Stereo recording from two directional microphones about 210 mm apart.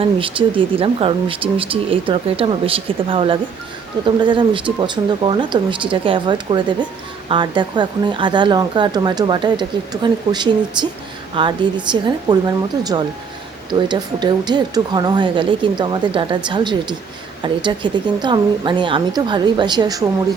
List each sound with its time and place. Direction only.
0.0 s speech: 25° right (ahead or behind)